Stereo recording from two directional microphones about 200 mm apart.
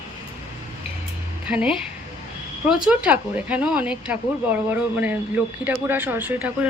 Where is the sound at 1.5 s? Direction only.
5° right (ahead or behind).